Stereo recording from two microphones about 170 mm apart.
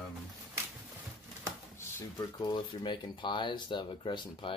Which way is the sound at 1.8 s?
20° left (ahead or behind).